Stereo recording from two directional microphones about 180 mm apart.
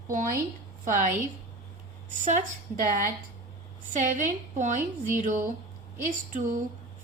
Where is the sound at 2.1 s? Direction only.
45° right (ahead or behind).